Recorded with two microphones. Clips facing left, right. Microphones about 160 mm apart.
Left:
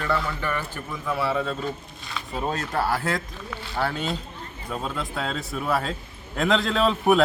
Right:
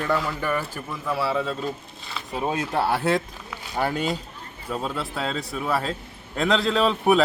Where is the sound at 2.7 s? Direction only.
25° right (ahead or behind).